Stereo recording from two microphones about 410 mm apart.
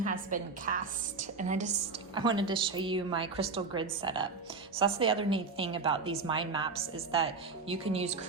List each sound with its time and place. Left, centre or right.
0.0 s a woman's voice: centre